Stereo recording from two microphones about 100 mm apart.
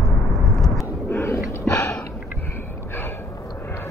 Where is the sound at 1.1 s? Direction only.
25° left (ahead or behind).